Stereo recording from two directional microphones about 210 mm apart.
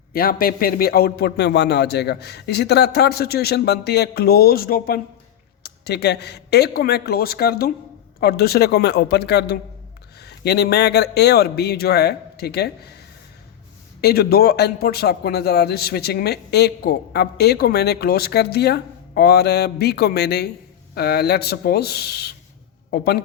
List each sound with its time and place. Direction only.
0.1 s a man's voice: 45° left (ahead or behind)
14.0 s a man's voice: 50° left (ahead or behind)